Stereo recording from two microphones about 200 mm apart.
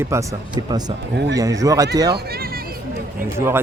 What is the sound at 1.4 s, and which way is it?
Speech, 15° right (ahead or behind).